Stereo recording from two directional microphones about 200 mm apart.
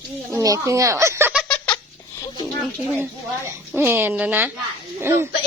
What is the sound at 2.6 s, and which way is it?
A woman's voice, 5° right (ahead or behind).